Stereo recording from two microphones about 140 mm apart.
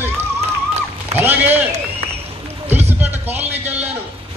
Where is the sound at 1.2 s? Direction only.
15° right (ahead or behind).